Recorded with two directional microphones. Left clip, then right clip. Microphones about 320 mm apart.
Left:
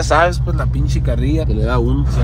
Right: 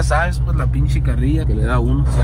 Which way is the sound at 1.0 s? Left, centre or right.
Centre.